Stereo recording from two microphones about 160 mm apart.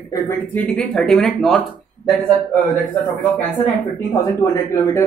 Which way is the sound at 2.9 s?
10° left (ahead or behind).